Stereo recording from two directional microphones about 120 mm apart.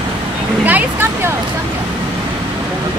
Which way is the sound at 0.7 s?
15° right (ahead or behind).